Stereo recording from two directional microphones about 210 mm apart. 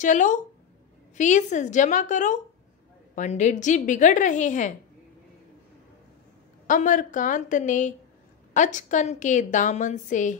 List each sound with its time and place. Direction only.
0.0 s a woman's voice: 35° left (ahead or behind)
6.7 s a woman's voice: 40° left (ahead or behind)